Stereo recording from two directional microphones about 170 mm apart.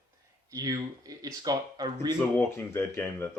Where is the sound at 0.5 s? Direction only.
20° right (ahead or behind).